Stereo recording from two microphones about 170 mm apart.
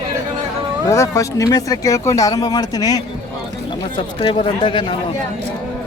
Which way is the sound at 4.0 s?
35° left (ahead or behind).